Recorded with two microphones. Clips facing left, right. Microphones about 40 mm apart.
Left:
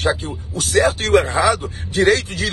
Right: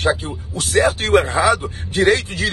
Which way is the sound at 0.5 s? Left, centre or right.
Right.